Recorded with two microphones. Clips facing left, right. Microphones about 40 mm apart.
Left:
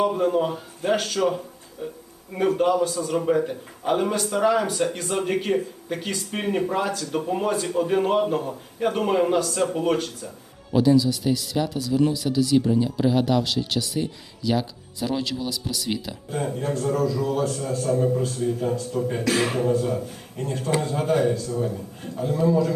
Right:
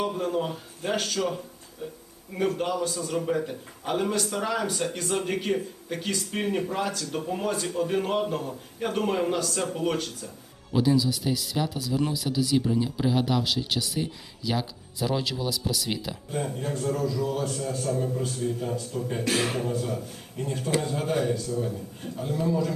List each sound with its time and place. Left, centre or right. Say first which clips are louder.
0.0 s speech: left 6 dB; centre
17.9 s speech: left 7 dB; centre
18.2 s speech: left 4 dB; centre
18.4 s speech: left 5 dB; centre
22.2 s speech: left 6 dB; centre